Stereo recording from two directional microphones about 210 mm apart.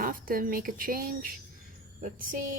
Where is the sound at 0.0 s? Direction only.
40° right (ahead or behind).